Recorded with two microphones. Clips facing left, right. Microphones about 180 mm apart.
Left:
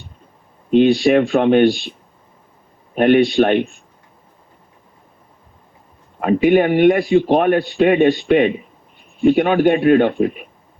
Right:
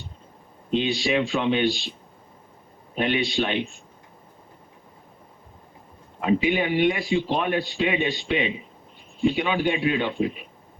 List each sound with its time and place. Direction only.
0.7 s a man's voice: 55° left (ahead or behind)
6.1 s a man's voice: 55° left (ahead or behind)